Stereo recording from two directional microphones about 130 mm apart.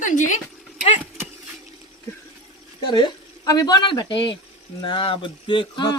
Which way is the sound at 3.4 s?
30° left (ahead or behind).